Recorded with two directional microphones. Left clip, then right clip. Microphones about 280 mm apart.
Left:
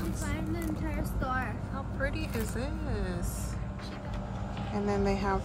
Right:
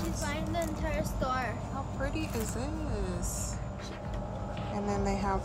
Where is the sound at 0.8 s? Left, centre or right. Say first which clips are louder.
Right 2 dB; right.